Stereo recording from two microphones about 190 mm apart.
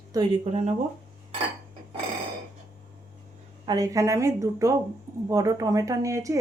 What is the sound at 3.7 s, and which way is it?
Speech, 15° right (ahead or behind).